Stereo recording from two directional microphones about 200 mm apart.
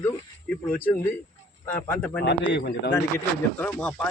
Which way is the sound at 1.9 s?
10° left (ahead or behind).